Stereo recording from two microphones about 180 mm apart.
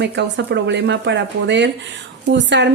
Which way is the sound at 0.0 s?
75° right (ahead or behind).